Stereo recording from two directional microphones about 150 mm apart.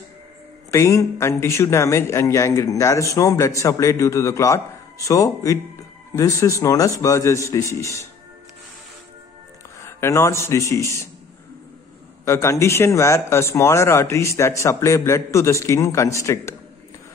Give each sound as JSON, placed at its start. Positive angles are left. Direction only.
{"t": 0.7, "sound": "a man's voice", "side_deg": 20}
{"t": 9.8, "sound": "a man's voice", "side_deg": 20}
{"t": 12.3, "sound": "a man's voice", "side_deg": 20}